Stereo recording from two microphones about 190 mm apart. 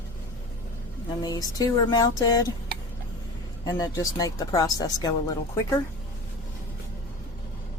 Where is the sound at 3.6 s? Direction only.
20° left (ahead or behind).